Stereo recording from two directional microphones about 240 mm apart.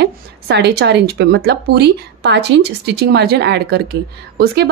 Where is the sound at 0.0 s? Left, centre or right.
Right.